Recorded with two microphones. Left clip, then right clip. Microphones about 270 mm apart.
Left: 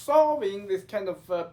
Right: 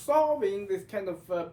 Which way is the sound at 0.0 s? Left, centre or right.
Centre.